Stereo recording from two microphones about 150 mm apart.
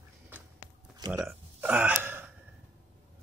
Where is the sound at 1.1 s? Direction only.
5° right (ahead or behind).